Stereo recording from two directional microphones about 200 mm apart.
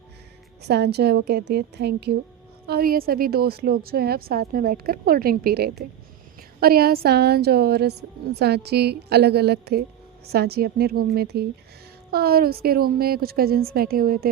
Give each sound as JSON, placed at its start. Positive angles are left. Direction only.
{"t": 0.7, "sound": "a woman's voice", "side_deg": -55}